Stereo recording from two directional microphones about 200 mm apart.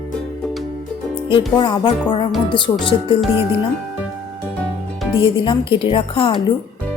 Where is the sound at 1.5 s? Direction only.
20° left (ahead or behind).